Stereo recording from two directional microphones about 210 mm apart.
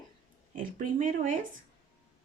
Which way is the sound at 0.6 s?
40° right (ahead or behind).